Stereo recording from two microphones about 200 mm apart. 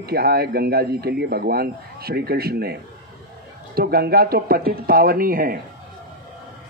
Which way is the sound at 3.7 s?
50° right (ahead or behind).